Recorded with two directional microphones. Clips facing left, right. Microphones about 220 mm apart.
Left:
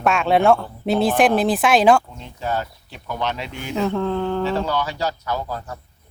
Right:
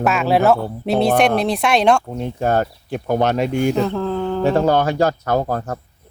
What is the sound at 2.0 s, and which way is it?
Speech, 55° right (ahead or behind).